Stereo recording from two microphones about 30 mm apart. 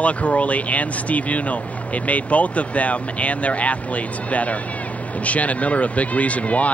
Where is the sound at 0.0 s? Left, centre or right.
Left.